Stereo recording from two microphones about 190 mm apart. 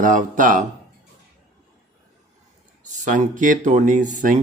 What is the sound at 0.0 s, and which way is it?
Speech, 45° right (ahead or behind).